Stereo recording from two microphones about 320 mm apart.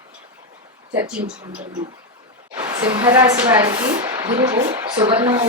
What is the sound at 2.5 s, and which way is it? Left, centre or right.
A woman's voice, centre.